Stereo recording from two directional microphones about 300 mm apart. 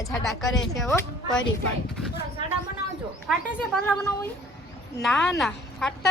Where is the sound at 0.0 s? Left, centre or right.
Centre.